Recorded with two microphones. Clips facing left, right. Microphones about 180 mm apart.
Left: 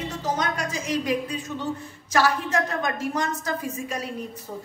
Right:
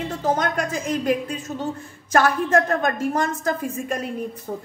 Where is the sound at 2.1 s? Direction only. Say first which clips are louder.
Right 4 dB; 50° right (ahead or behind).